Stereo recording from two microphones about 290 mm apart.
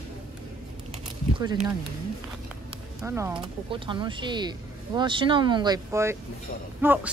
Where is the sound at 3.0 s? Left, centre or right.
Centre.